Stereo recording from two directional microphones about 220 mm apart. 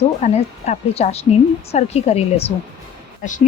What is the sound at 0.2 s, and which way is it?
A woman's voice, 30° left (ahead or behind).